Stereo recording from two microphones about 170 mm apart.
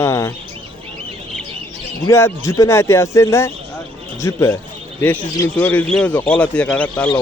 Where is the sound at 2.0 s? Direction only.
15° left (ahead or behind).